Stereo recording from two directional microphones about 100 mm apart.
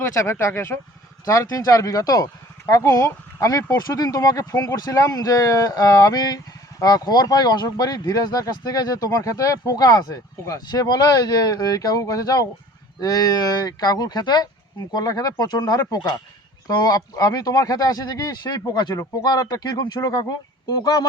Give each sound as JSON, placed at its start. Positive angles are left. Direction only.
{"t": 0.2, "sound": "speech", "side_deg": 30}
{"t": 1.2, "sound": "speech", "side_deg": 35}